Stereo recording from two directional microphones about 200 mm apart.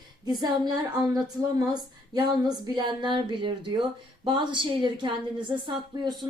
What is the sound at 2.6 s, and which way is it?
Speech, 20° right (ahead or behind).